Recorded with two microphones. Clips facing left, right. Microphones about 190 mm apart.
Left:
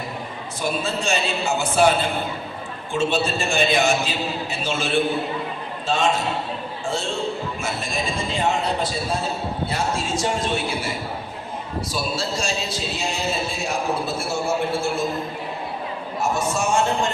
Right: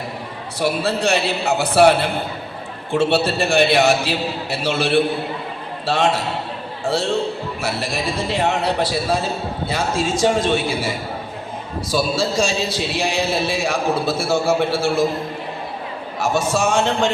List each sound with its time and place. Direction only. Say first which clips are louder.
0.6 s a man's voice: right 5 dB; 70° right (ahead or behind)
9.6 s a man's voice: right 5 dB; 90° right
16.1 s a man's voice: right 4 dB; 90° right